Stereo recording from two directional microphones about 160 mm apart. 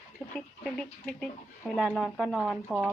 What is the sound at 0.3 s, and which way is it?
Speech, 5° left (ahead or behind).